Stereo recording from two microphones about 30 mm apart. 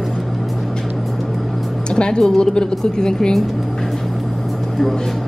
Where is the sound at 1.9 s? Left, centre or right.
Left.